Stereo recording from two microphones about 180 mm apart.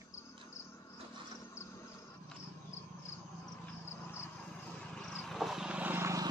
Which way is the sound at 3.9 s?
15° left (ahead or behind).